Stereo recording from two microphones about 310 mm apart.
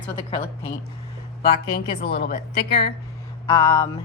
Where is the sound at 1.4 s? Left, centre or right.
Left.